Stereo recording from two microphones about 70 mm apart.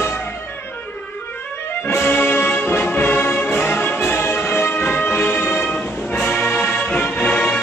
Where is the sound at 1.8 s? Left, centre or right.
Left.